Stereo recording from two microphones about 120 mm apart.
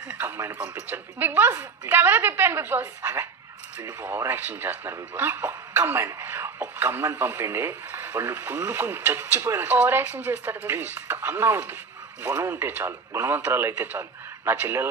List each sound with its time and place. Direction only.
0.2 s speech: 20° right (ahead or behind)